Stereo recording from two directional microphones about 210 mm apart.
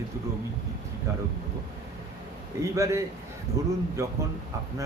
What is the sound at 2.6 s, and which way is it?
A man's voice, 15° right (ahead or behind).